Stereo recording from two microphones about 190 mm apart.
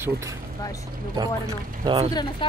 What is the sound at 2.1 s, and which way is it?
Speech, 20° left (ahead or behind).